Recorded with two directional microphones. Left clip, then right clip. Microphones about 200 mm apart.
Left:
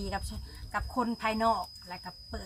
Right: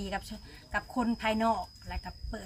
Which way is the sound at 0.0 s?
15° right (ahead or behind).